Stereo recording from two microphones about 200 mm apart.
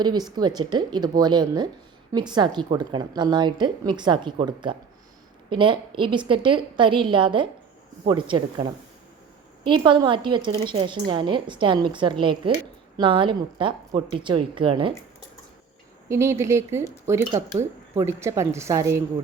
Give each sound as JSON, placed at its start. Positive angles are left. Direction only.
{"t": 0.0, "sound": "a woman's voice", "side_deg": -20}
{"t": 9.6, "sound": "a woman's voice", "side_deg": -25}
{"t": 16.0, "sound": "speech", "side_deg": -15}